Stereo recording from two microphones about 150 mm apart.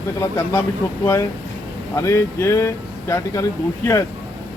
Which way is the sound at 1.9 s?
20° left (ahead or behind).